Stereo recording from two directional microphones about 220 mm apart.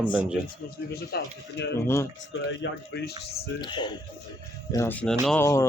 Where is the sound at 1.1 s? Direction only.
45° left (ahead or behind).